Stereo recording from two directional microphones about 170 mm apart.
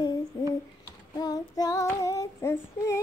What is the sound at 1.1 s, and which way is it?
Female singing, 20° left (ahead or behind).